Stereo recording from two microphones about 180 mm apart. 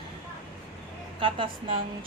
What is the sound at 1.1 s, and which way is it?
Speech, 30° right (ahead or behind).